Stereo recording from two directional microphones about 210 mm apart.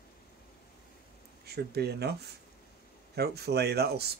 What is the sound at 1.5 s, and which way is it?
Speech, 50° right (ahead or behind).